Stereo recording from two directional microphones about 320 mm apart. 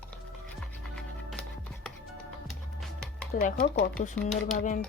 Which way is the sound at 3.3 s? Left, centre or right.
Left.